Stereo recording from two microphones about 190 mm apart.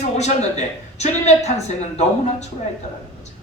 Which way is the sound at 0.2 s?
35° left (ahead or behind).